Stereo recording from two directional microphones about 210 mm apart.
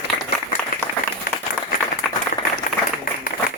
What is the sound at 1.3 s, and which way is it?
Applause, 45° left (ahead or behind).